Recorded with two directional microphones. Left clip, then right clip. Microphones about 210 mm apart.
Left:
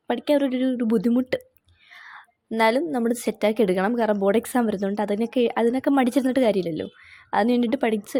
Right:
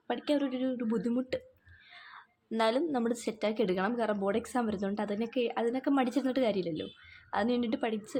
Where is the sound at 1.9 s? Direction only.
30° left (ahead or behind).